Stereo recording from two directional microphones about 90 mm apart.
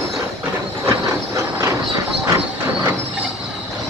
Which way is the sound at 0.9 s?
35° right (ahead or behind).